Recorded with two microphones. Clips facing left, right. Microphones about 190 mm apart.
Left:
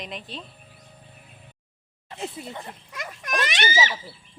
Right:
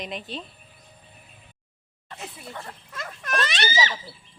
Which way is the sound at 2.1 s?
25° left (ahead or behind).